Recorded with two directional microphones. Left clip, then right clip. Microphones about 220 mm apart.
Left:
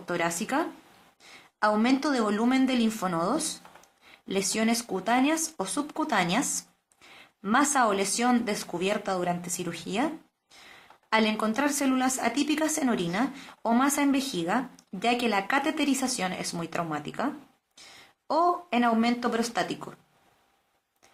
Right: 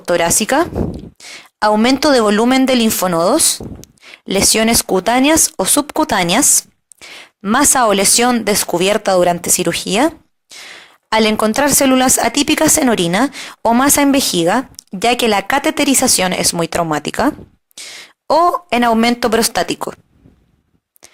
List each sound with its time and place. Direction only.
0.0 s speech: 40° right (ahead or behind)
11.1 s speech: 40° right (ahead or behind)